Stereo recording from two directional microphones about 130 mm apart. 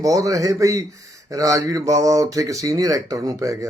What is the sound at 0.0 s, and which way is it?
Speech, 25° right (ahead or behind).